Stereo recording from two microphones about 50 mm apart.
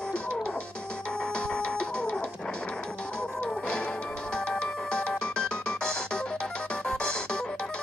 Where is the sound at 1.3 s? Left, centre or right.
Left.